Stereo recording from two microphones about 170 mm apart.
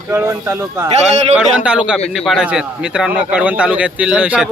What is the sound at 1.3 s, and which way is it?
A man's voice, 5° right (ahead or behind).